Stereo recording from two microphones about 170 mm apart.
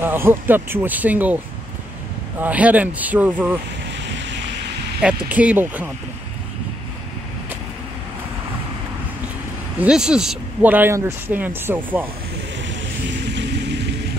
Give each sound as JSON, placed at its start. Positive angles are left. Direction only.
{"t": 0.0, "sound": "speech", "side_deg": -10}
{"t": 2.4, "sound": "speech", "side_deg": -10}
{"t": 3.9, "sound": "vehicle", "side_deg": -90}
{"t": 5.0, "sound": "speech", "side_deg": -5}
{"t": 9.8, "sound": "speech", "side_deg": -5}
{"t": 13.2, "sound": "vehicle", "side_deg": -90}